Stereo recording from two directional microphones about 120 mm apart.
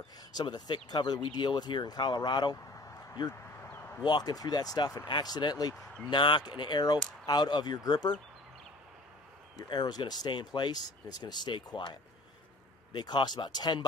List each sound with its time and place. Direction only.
0.3 s speech: 35° left (ahead or behind)
4.0 s speech: 35° left (ahead or behind)
9.6 s speech: 35° left (ahead or behind)
12.9 s speech: 35° left (ahead or behind)